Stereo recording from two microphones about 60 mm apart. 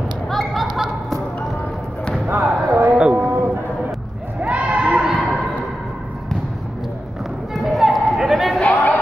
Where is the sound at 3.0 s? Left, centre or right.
Centre.